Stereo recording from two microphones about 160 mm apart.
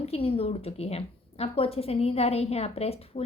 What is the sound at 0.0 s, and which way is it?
A woman's voice, 35° left (ahead or behind).